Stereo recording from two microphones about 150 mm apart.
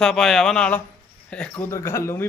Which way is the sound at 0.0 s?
Centre (ahead or behind).